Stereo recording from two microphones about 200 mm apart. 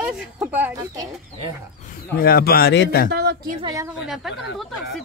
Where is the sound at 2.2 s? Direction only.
45° left (ahead or behind).